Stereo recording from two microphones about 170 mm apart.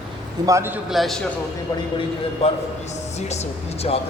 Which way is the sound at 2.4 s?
40° left (ahead or behind).